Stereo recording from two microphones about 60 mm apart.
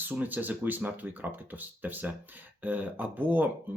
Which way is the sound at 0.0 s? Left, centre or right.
Right.